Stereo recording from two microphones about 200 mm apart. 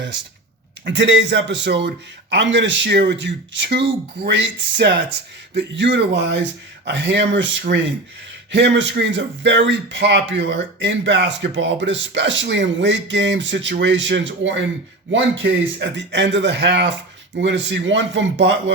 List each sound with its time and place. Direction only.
0.9 s speech: 65° right (ahead or behind)